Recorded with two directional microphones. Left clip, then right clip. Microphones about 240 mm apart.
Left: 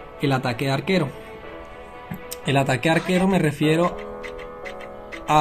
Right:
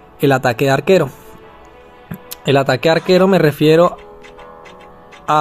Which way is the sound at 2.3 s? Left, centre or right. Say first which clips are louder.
Right 8 dB; centre.